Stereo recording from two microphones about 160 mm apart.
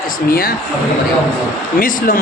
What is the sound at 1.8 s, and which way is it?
Speech, 60° left (ahead or behind).